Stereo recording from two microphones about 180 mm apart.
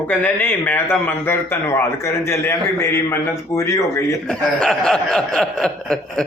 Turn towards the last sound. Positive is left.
turn(degrees=5)  # may be behind; listen again after turning